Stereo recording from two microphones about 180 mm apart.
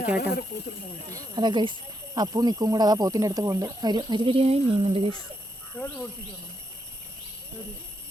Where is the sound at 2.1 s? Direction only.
20° right (ahead or behind).